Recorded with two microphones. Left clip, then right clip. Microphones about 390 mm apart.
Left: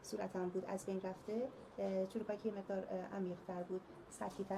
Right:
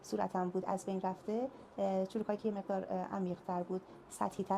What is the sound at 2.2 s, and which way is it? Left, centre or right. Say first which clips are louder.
Speech: right 5 dB; right.